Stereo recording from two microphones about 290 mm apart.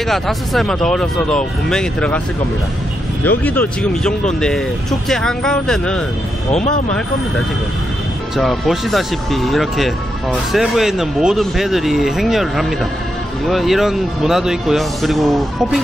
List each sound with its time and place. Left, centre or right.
0.1 s speech: centre
3.3 s speech: centre
8.4 s speech: centre